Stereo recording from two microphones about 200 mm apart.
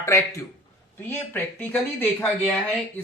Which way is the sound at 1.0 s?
10° left (ahead or behind).